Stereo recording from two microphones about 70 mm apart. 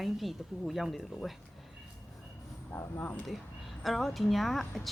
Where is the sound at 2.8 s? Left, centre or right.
Left.